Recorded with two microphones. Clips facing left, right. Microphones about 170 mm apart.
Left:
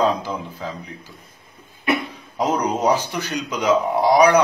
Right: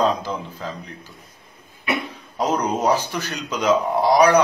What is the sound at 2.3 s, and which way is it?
A man's voice, 15° left (ahead or behind).